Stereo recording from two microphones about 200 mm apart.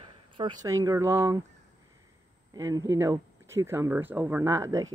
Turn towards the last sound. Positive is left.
turn(degrees=-15)  # may be behind; listen again after turning